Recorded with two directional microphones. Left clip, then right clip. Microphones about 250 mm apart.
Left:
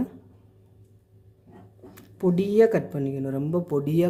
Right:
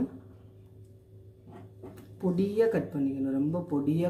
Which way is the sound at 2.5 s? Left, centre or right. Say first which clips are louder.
Left 7 dB; left.